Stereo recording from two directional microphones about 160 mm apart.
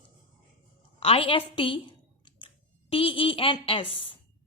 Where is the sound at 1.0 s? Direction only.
35° left (ahead or behind).